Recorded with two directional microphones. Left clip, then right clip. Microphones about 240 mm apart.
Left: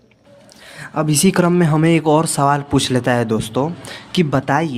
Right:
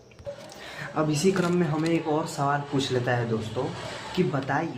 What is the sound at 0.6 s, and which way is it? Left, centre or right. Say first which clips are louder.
Speech: left 6 dB; left.